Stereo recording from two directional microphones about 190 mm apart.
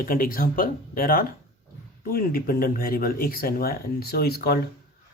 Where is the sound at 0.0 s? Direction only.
50° left (ahead or behind).